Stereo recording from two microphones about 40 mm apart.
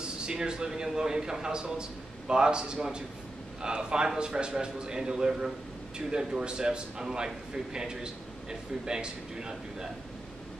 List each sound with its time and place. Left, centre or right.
0.0 s a man's voice: right